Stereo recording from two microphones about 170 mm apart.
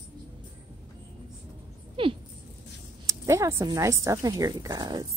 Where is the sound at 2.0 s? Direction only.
30° right (ahead or behind).